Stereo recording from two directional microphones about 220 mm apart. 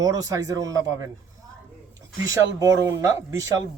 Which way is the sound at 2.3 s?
15° right (ahead or behind).